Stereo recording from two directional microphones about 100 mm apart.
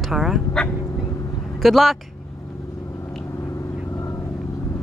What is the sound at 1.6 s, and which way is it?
Speech, centre (ahead or behind).